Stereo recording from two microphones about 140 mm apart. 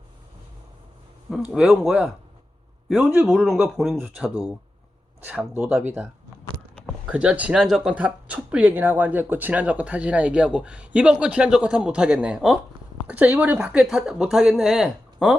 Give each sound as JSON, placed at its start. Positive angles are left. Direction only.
{"t": 1.3, "sound": "speech", "side_deg": -5}
{"t": 3.2, "sound": "speech", "side_deg": 0}
{"t": 7.1, "sound": "speech", "side_deg": -10}